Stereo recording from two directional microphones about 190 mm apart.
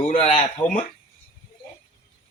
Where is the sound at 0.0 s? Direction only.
40° left (ahead or behind).